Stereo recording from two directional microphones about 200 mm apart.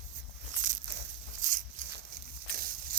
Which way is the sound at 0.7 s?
40° right (ahead or behind).